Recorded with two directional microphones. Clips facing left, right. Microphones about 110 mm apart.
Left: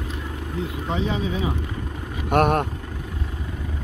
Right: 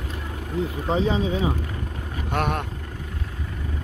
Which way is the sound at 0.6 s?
35° right (ahead or behind).